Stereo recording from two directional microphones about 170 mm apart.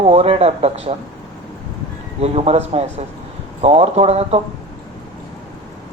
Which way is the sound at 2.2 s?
35° right (ahead or behind).